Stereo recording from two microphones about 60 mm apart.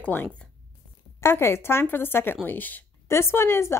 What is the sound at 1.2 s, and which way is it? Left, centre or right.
A woman's voice, left.